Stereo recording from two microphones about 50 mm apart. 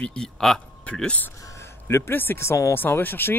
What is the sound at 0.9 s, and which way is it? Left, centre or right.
Speech, left.